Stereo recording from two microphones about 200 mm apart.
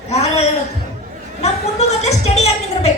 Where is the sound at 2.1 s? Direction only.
35° left (ahead or behind).